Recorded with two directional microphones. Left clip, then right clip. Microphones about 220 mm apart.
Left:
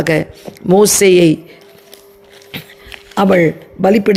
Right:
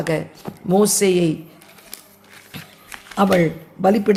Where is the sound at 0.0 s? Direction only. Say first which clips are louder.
Left 8 dB; 40° left (ahead or behind).